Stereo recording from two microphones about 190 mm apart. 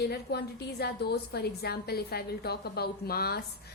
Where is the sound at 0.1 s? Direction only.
55° left (ahead or behind).